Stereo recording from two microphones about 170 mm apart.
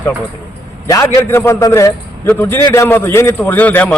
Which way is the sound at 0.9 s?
15° left (ahead or behind).